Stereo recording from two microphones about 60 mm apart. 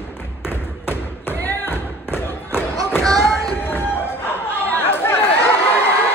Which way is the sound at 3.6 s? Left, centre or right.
Left.